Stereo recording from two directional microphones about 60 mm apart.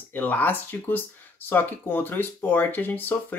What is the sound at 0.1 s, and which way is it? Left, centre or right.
Speech, left.